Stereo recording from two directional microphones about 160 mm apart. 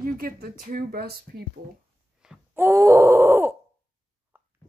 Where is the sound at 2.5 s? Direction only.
15° right (ahead or behind).